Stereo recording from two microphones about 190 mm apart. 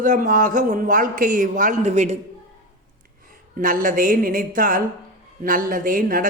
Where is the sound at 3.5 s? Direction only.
45° right (ahead or behind).